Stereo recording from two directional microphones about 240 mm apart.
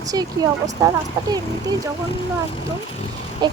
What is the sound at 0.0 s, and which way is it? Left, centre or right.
Speech, centre.